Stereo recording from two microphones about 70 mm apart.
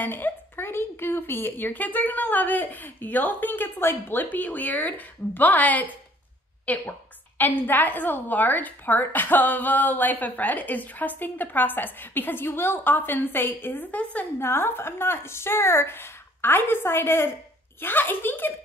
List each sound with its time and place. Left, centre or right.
0.0 s a woman's voice: left
14.4 s a woman's voice: left